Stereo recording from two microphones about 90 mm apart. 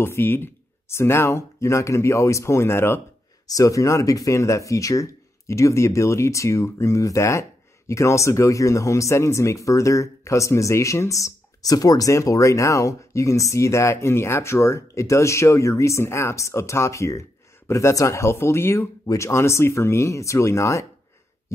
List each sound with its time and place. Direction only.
0.0 s speech: 25° left (ahead or behind)
3.4 s speech: 40° left (ahead or behind)